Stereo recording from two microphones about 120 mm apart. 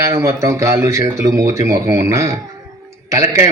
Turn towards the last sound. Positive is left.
turn(degrees=-25)  # may be behind; listen again after turning